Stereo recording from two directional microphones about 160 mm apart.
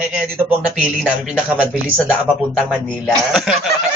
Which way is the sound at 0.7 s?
5° right (ahead or behind).